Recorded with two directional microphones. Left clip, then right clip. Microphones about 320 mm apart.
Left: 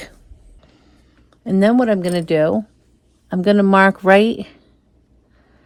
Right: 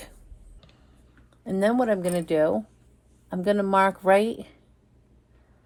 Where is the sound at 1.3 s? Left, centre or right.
Left.